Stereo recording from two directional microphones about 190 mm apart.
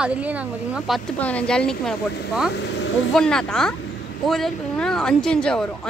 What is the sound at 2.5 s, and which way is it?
Speech, 70° left (ahead or behind).